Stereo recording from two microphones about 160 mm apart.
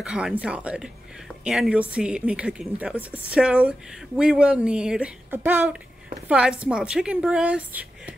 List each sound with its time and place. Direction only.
0.0 s a woman's voice: 5° right (ahead or behind)